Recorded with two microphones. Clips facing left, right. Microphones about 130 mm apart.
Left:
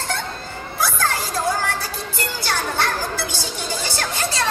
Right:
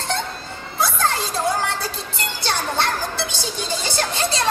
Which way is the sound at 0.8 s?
25° right (ahead or behind).